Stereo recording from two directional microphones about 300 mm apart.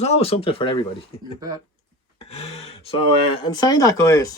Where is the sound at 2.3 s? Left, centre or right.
Left.